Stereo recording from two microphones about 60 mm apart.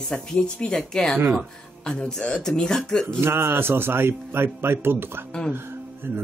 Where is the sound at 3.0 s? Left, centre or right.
Right.